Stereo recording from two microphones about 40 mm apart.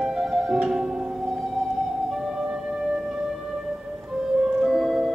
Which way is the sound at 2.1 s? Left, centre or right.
Centre.